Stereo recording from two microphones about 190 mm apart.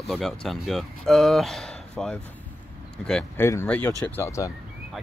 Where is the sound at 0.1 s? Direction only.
Centre (ahead or behind).